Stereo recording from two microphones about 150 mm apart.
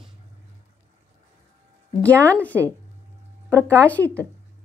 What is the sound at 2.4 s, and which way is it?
Speech, 10° left (ahead or behind).